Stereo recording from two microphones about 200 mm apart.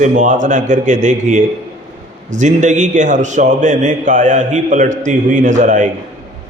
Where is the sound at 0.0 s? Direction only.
40° right (ahead or behind).